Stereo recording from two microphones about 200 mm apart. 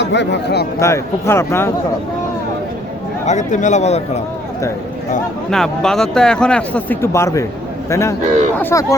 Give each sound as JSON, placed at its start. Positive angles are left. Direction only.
{"t": 0.0, "sound": "speech", "side_deg": 60}
{"t": 0.8, "sound": "speech", "side_deg": 15}
{"t": 3.2, "sound": "speech", "side_deg": 35}
{"t": 5.5, "sound": "speech", "side_deg": 5}